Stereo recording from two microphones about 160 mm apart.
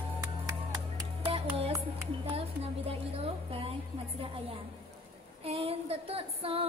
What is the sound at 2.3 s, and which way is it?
Speech, 35° right (ahead or behind).